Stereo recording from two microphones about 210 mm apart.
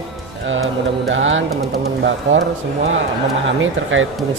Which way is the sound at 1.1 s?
65° right (ahead or behind).